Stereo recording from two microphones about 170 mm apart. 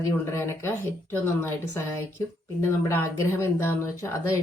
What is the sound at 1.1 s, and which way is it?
A woman's voice, 15° left (ahead or behind).